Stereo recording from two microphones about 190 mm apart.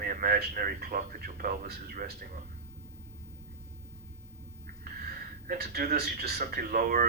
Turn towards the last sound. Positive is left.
turn(degrees=-50)  # may be behind; listen again after turning